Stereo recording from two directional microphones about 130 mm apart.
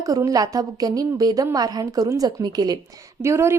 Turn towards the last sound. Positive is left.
turn(degrees=-20)  # may be behind; listen again after turning